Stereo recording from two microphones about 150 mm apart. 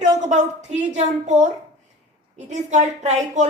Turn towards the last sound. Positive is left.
turn(degrees=-50)  # may be behind; listen again after turning